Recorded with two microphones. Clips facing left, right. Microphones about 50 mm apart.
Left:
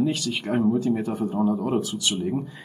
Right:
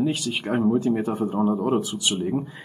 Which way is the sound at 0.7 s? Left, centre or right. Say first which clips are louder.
Right 1 dB; right.